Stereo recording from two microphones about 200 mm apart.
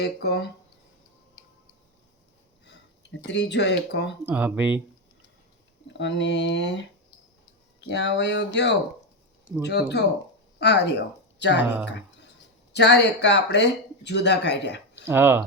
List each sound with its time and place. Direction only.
0.0 s speech: 55° left (ahead or behind)
2.6 s speech: 60° left (ahead or behind)
4.3 s speech: 10° right (ahead or behind)
5.9 s speech: 60° left (ahead or behind)
7.9 s speech: 60° left (ahead or behind)
12.7 s speech: 55° left (ahead or behind)
15.0 s speech: 10° right (ahead or behind)